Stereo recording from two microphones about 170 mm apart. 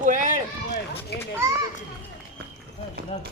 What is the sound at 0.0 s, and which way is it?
Run, 50° right (ahead or behind).